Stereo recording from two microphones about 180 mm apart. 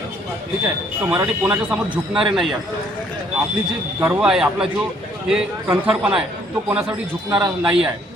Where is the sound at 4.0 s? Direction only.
5° right (ahead or behind).